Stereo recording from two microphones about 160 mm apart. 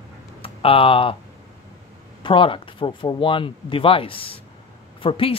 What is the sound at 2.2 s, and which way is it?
Speech, 30° left (ahead or behind).